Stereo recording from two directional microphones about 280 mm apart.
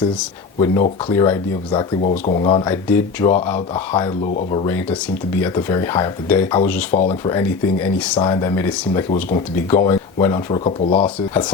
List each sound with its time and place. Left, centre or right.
0.6 s speech: centre
2.0 s speech: left
6.9 s speech: left
7.3 s speech: centre